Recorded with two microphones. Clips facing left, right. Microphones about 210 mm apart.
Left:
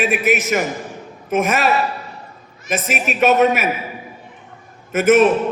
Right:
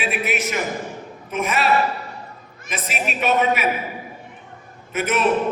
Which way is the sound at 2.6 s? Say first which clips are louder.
Left 5 dB; 45° left (ahead or behind).